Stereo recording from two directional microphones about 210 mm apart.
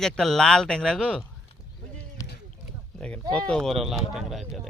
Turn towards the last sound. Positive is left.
turn(degrees=0)  # may be behind; listen again after turning